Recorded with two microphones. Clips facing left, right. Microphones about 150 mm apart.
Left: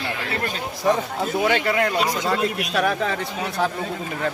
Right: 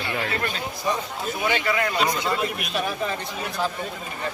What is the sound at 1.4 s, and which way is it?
Speech, 55° left (ahead or behind).